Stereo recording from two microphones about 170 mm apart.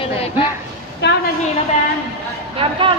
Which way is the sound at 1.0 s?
90° left.